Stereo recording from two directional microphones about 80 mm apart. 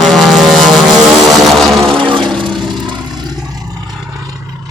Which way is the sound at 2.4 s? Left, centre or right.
Right.